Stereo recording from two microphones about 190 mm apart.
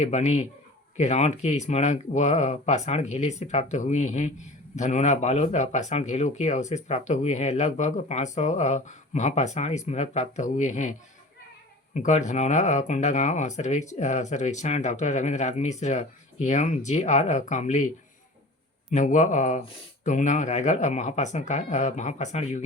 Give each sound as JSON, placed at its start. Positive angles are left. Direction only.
{"t": 0.0, "sound": "speech", "side_deg": 35}
{"t": 11.9, "sound": "speech", "side_deg": 40}
{"t": 18.9, "sound": "speech", "side_deg": 40}